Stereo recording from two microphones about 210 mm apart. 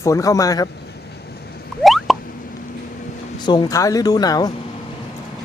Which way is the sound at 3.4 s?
20° left (ahead or behind).